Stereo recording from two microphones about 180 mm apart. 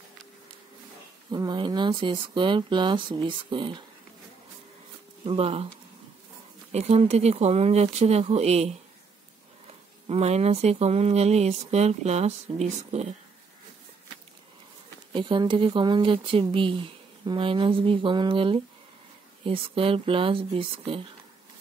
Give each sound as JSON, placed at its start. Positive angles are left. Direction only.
{"t": 1.3, "sound": "speech", "side_deg": -25}
{"t": 5.2, "sound": "speech", "side_deg": -30}
{"t": 6.7, "sound": "speech", "side_deg": -35}
{"t": 10.0, "sound": "speech", "side_deg": -35}
{"t": 15.1, "sound": "speech", "side_deg": -25}